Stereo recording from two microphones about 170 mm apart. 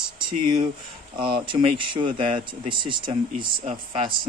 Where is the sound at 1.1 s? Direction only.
30° right (ahead or behind).